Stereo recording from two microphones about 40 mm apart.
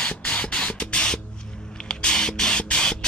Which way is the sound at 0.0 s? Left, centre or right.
Left.